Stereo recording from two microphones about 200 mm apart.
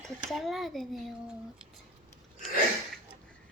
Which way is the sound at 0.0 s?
Centre (ahead or behind).